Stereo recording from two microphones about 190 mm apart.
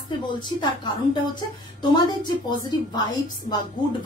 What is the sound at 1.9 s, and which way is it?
A woman's voice, 20° left (ahead or behind).